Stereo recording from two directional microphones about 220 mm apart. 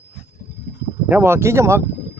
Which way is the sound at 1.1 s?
10° right (ahead or behind).